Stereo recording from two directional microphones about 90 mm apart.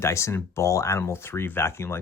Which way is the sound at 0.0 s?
30° left (ahead or behind).